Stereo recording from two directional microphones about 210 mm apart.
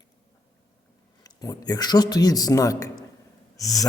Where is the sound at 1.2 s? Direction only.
20° left (ahead or behind).